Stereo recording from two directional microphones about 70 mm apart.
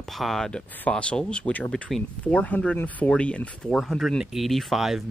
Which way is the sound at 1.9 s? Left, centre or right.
Centre.